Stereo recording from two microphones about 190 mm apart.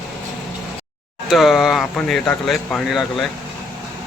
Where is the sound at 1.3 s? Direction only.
Centre (ahead or behind).